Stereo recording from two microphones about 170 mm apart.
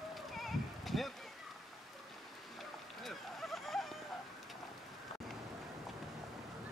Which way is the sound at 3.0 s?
Centre (ahead or behind).